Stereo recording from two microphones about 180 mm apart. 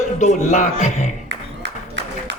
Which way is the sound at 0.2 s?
40° left (ahead or behind).